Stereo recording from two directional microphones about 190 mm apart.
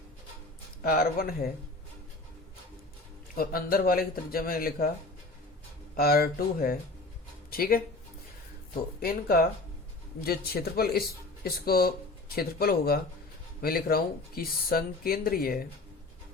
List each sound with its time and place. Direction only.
0.8 s speech: 50° left (ahead or behind)
3.3 s speech: 50° left (ahead or behind)
6.0 s speech: 50° left (ahead or behind)
9.0 s speech: 50° left (ahead or behind)